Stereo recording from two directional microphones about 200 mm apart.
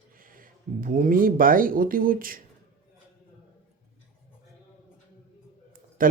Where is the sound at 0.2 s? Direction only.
45° right (ahead or behind).